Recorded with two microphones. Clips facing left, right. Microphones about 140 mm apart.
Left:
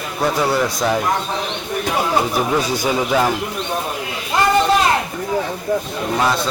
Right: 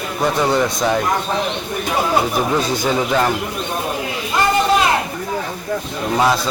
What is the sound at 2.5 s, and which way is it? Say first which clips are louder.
Speech: right 1 dB; 10° left (ahead or behind).